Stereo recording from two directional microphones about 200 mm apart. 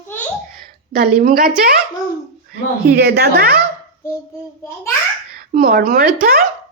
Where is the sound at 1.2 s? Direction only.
45° right (ahead or behind).